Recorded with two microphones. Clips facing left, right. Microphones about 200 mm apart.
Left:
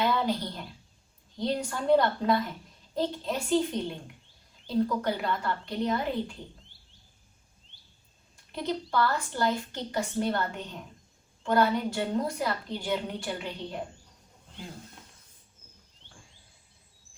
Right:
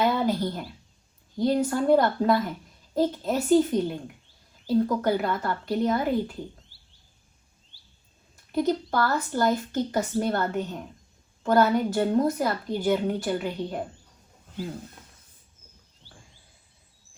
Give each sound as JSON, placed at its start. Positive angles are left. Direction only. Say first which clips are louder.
{"t": 0.0, "sound": "a sound", "louder": "right 4 dB", "side_deg": -50}
{"t": 1.4, "sound": "a woman's voice", "louder": "right 7 dB", "side_deg": -45}
{"t": 8.5, "sound": "a woman's voice", "louder": "right 5 dB", "side_deg": -45}